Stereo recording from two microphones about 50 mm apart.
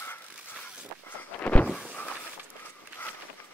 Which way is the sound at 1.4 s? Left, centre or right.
Left.